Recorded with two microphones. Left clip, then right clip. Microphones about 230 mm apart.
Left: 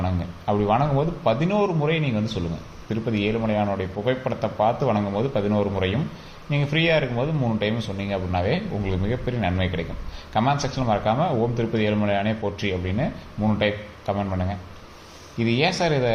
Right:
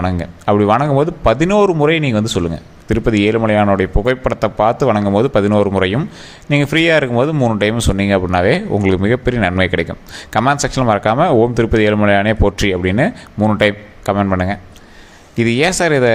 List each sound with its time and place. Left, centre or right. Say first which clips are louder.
0.0 s speech: right 9 dB; right